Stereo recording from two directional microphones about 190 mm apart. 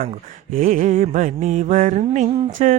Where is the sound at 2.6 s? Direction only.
40° right (ahead or behind).